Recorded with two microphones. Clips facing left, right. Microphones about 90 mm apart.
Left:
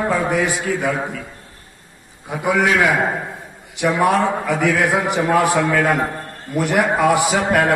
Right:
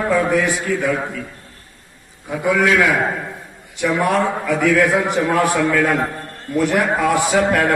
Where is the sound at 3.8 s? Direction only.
10° left (ahead or behind).